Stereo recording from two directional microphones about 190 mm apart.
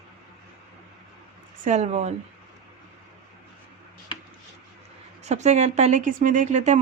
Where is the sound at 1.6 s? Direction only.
35° right (ahead or behind).